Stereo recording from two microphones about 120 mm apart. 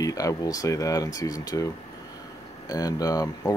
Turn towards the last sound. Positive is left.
turn(degrees=30)  # may be behind; listen again after turning